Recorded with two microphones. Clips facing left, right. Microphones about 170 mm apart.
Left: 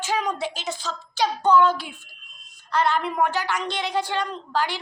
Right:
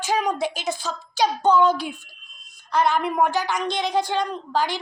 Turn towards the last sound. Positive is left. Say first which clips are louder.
# right 2 dB
turn(degrees=-15)  # may be behind; listen again after turning